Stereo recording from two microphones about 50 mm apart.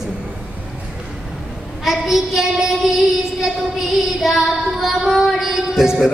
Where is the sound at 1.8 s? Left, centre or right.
Centre.